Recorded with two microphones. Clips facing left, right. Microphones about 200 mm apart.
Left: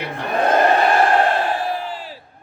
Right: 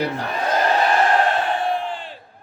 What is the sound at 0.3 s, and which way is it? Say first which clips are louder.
Crowd: left 7 dB; 55° left (ahead or behind).